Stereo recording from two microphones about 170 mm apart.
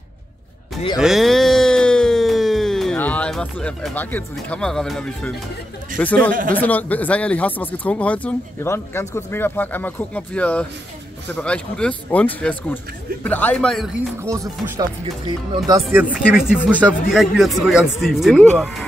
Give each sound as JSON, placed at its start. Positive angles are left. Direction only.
{"t": 0.9, "sound": "a sound", "side_deg": 0}
{"t": 5.9, "sound": "speech", "side_deg": 10}
{"t": 14.2, "sound": "speech", "side_deg": -20}
{"t": 15.9, "sound": "speech", "side_deg": -10}